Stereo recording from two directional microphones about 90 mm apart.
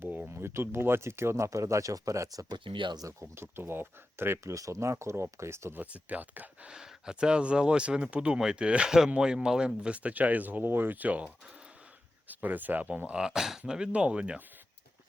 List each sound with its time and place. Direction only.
0.0 s speech: 20° right (ahead or behind); by 2.6 s 40° right (ahead or behind)
2.6 s speech: 65° right (ahead or behind)
3.0 s speech: 35° right (ahead or behind)
5.8 s speech: 15° right (ahead or behind)